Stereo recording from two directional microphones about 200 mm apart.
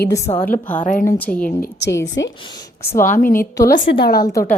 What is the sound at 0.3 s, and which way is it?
Speech, 30° left (ahead or behind).